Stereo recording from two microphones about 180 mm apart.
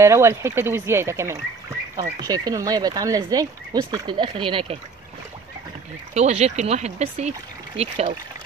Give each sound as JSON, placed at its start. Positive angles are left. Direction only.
{"t": 0.0, "sound": "speech", "side_deg": -15}
{"t": 6.1, "sound": "speech", "side_deg": -35}